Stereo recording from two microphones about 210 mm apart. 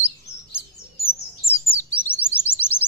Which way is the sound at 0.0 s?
10° left (ahead or behind).